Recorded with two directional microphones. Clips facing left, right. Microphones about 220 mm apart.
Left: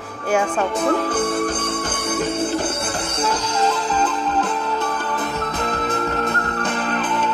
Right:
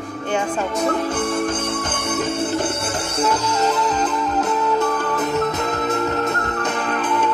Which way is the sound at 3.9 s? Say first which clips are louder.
Even; 35° left (ahead or behind).